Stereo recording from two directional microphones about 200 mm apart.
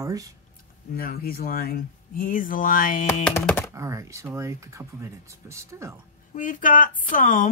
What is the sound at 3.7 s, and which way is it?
Speech, 15° right (ahead or behind).